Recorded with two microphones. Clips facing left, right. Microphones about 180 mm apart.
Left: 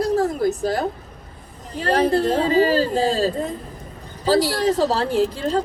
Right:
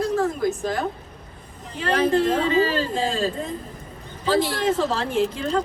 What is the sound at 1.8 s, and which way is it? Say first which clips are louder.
A woman's voice: left 2 dB; 35° left (ahead or behind).